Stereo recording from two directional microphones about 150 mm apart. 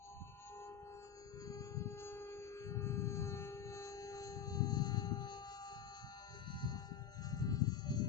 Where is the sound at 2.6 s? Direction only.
20° left (ahead or behind).